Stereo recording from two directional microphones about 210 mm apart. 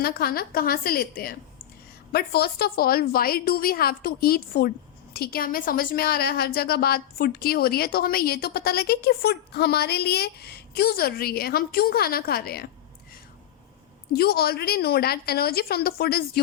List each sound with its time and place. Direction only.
0.0 s a woman's voice: 45° left (ahead or behind)
14.1 s a woman's voice: 45° left (ahead or behind)